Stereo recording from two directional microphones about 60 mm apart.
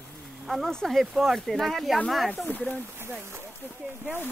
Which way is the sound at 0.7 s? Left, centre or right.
Centre.